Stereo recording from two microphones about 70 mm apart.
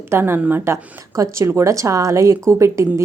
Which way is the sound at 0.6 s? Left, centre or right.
Right.